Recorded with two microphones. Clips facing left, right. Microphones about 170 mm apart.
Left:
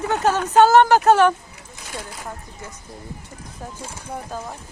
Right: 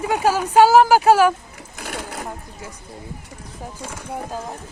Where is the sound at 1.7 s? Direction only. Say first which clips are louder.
Right 4 dB; 65° right (ahead or behind).